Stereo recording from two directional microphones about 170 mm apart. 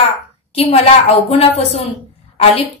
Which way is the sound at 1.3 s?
35° left (ahead or behind).